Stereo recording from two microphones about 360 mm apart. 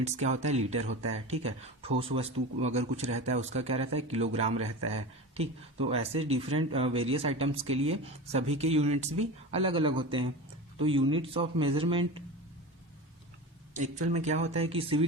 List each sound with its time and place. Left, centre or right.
0.0 s speech: centre
13.7 s speech: centre